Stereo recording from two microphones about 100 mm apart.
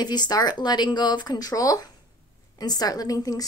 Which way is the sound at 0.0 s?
45° left (ahead or behind).